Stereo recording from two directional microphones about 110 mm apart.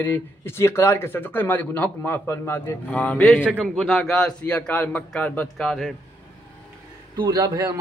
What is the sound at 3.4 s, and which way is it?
Speech, 10° right (ahead or behind).